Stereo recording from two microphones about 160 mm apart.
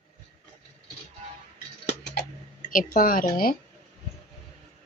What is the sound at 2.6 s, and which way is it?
Speech, 55° left (ahead or behind).